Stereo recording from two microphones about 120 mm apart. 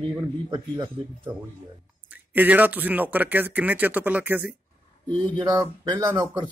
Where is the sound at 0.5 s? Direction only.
35° right (ahead or behind).